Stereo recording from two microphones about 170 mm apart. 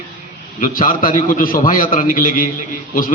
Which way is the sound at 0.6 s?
55° left (ahead or behind).